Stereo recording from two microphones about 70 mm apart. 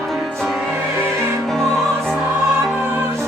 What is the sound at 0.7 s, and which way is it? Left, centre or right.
Music, right.